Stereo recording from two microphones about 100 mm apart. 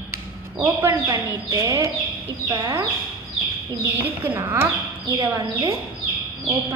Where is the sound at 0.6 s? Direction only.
20° right (ahead or behind).